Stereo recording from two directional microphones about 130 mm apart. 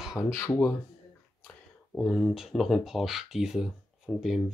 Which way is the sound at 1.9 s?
Centre (ahead or behind).